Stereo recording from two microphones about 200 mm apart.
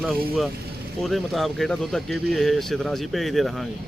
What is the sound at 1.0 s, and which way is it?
A man's voice, centre (ahead or behind).